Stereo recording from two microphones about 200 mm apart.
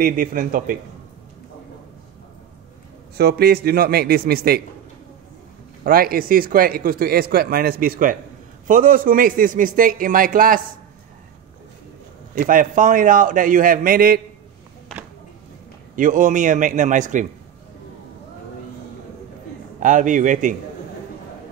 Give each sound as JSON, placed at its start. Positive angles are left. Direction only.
{"t": 0.0, "sound": "a man's voice", "side_deg": -45}
{"t": 3.2, "sound": "a man's voice", "side_deg": -50}
{"t": 5.9, "sound": "a man's voice", "side_deg": -45}
{"t": 12.4, "sound": "a man's voice", "side_deg": -45}
{"t": 16.0, "sound": "a man's voice", "side_deg": -40}
{"t": 19.8, "sound": "a man's voice", "side_deg": -40}